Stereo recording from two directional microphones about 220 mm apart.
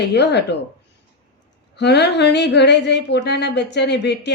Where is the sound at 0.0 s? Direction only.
50° left (ahead or behind).